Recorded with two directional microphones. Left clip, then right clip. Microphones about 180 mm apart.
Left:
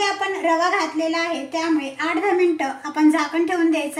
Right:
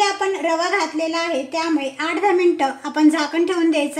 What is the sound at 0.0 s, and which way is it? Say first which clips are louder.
A woman's voice: right 2 dB; 60° right (ahead or behind).